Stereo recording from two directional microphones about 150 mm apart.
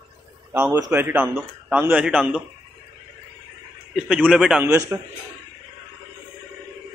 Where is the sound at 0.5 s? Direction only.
15° right (ahead or behind).